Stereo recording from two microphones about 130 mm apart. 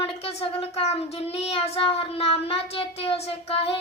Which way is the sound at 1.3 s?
50° left (ahead or behind).